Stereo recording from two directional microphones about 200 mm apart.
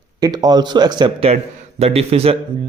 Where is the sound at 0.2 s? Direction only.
20° right (ahead or behind).